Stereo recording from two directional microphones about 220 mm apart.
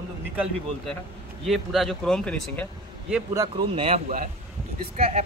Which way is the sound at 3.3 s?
20° right (ahead or behind).